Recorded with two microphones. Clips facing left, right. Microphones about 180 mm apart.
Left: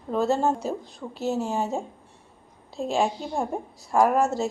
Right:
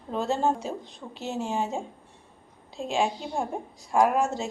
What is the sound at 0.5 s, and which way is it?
A woman's voice, 40° left (ahead or behind).